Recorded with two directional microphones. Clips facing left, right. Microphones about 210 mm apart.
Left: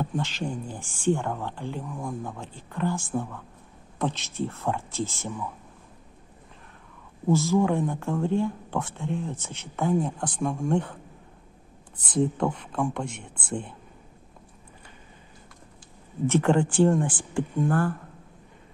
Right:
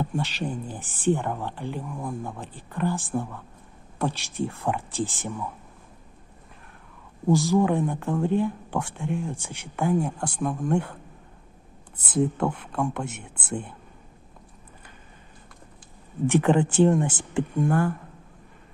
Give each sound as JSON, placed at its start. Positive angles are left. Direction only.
{"t": 0.0, "sound": "speech", "side_deg": -15}
{"t": 2.4, "sound": "speech", "side_deg": -15}
{"t": 7.2, "sound": "speech", "side_deg": -15}
{"t": 12.1, "sound": "speech", "side_deg": -5}
{"t": 16.3, "sound": "speech", "side_deg": -15}